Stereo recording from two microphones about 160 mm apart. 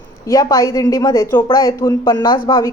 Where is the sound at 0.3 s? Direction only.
20° left (ahead or behind).